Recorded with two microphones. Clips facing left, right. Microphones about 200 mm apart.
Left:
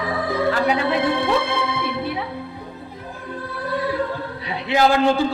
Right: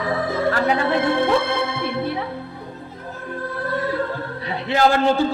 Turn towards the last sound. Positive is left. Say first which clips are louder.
# even
turn(degrees=15)  # may be behind; listen again after turning